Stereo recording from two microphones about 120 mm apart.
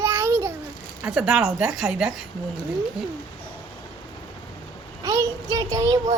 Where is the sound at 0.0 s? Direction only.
20° right (ahead or behind).